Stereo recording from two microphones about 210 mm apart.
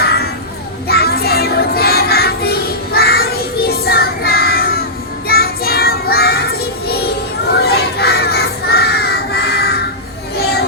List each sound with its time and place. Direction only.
0.0 s child singing: 50° left (ahead or behind)
0.9 s music: 50° left (ahead or behind)
5.3 s child singing: 45° left (ahead or behind)
7.6 s crowd: 50° left (ahead or behind)
10.3 s a sound: 50° left (ahead or behind)